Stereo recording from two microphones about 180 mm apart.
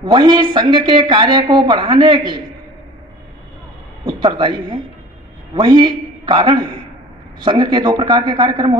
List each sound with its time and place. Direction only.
0.0 s speech: 25° right (ahead or behind)
4.0 s a man's voice: 25° right (ahead or behind)